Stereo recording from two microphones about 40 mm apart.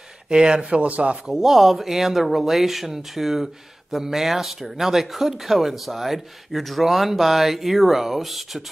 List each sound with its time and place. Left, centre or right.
0.3 s speech: centre
0.7 s a man's voice: right
1.2 s speech: centre